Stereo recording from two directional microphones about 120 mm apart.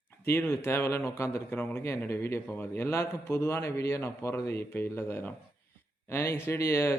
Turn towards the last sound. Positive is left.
turn(degrees=20)  # may be behind; listen again after turning